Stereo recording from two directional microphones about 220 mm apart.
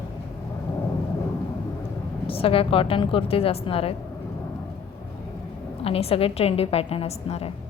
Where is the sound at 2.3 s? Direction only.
25° left (ahead or behind).